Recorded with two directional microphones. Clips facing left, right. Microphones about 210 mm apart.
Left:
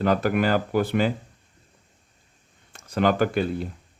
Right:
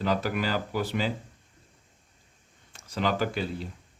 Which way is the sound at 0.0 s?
55° left (ahead or behind).